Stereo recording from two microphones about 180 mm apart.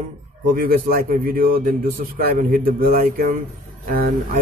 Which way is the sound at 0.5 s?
50° right (ahead or behind).